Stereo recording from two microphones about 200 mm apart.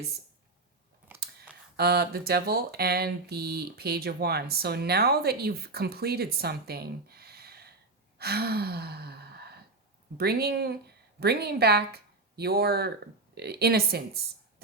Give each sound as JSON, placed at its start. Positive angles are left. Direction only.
{"t": 1.1, "sound": "a sound", "side_deg": -10}
{"t": 1.7, "sound": "speech", "side_deg": -50}
{"t": 8.2, "sound": "gasp", "side_deg": -50}
{"t": 10.2, "sound": "speech", "side_deg": -50}